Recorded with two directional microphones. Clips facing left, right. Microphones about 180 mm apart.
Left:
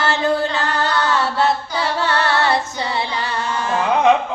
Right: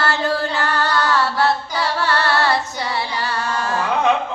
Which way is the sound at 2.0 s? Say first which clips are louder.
Left 1 dB; 20° left (ahead or behind).